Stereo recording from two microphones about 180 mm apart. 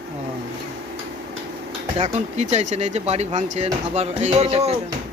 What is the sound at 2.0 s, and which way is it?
Speech, 35° right (ahead or behind).